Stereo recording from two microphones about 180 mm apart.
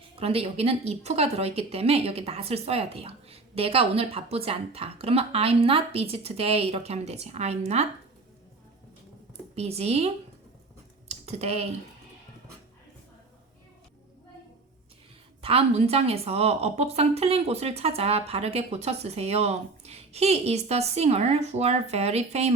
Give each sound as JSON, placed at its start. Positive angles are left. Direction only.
{"t": 0.2, "sound": "a woman's voice", "side_deg": -35}
{"t": 9.6, "sound": "a woman's voice", "side_deg": -35}
{"t": 11.1, "sound": "typing", "side_deg": -35}
{"t": 15.4, "sound": "a woman's voice", "side_deg": -35}